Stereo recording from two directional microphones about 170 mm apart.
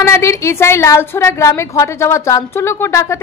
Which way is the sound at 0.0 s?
15° left (ahead or behind).